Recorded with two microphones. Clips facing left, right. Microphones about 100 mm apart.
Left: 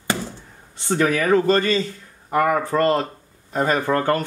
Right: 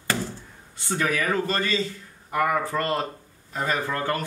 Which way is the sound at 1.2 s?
30° left (ahead or behind).